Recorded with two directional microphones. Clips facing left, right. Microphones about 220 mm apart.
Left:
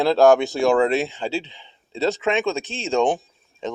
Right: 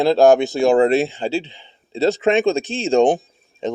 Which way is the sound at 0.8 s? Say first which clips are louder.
Right 4 dB; 35° right (ahead or behind).